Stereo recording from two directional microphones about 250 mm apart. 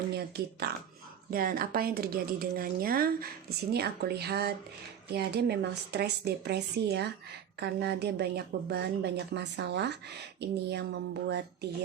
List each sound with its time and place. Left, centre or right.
0.6 s speech: right